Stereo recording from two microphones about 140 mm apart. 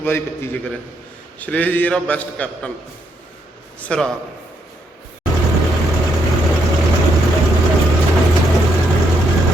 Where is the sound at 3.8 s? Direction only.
5° left (ahead or behind).